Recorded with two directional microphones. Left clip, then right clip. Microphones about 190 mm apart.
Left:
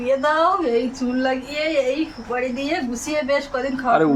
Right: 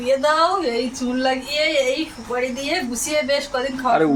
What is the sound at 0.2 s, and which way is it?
A woman's voice, 10° left (ahead or behind).